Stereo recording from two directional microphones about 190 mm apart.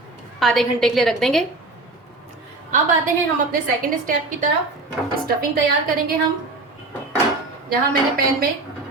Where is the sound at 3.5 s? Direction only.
45° right (ahead or behind).